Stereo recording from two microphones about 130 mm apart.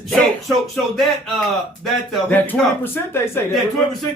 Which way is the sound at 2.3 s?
15° left (ahead or behind).